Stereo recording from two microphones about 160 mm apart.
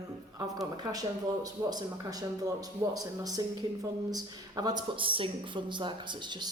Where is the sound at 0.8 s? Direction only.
25° right (ahead or behind).